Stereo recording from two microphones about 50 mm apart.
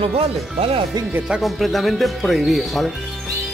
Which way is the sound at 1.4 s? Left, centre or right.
Centre.